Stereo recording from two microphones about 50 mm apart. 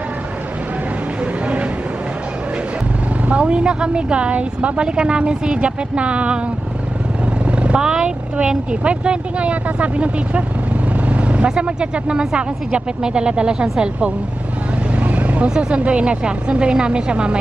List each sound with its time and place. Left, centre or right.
3.3 s a woman's voice: right
7.5 s a woman's voice: right
15.0 s vehicle: right
15.5 s a woman's voice: right